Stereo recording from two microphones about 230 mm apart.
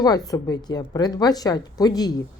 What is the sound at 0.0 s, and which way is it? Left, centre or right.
Speech, centre.